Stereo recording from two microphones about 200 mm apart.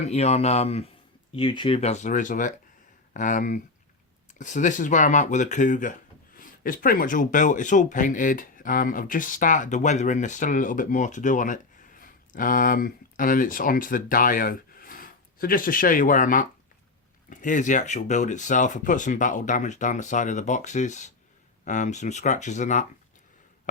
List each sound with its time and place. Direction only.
0.0 s speech: 30° left (ahead or behind)